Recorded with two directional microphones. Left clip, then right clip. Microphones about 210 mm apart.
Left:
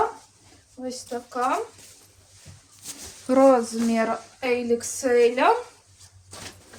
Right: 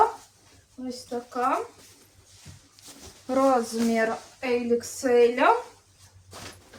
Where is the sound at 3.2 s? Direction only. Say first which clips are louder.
Left 5 dB; 50° left (ahead or behind).